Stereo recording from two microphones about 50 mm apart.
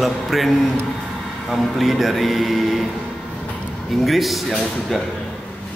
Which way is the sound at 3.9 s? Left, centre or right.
Centre.